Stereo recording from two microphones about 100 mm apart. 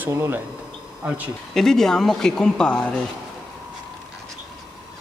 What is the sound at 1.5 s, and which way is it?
Speech, 5° left (ahead or behind).